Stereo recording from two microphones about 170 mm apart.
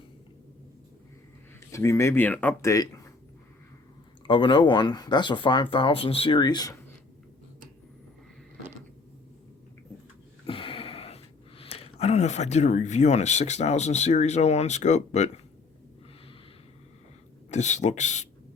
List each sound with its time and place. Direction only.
1.7 s speech: 15° left (ahead or behind)
4.3 s speech: 30° left (ahead or behind)
10.4 s speech: 30° left (ahead or behind)
17.5 s speech: 45° left (ahead or behind)